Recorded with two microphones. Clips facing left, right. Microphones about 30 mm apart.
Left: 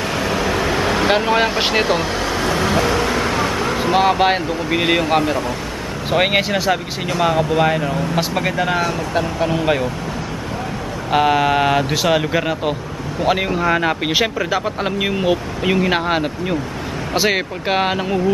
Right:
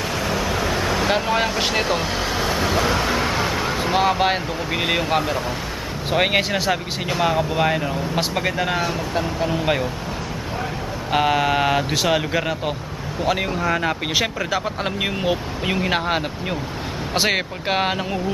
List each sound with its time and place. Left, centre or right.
0.2 s vehicle: centre
2.0 s vehicle: centre
3.3 s speech: centre
11.1 s speech: centre